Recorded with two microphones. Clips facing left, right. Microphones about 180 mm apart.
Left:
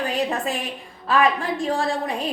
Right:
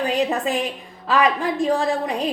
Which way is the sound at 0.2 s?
20° right (ahead or behind).